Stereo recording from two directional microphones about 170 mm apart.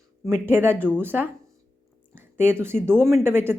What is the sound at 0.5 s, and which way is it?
Speech, 10° right (ahead or behind).